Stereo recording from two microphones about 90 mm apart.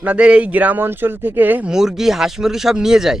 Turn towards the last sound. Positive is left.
turn(degrees=-5)  # may be behind; listen again after turning